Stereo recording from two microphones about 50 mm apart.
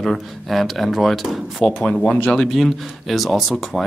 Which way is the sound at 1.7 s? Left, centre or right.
Left.